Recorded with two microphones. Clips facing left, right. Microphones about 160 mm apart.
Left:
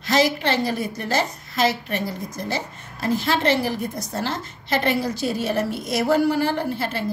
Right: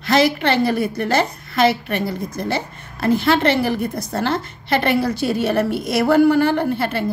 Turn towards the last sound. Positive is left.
turn(degrees=-60)  # may be behind; listen again after turning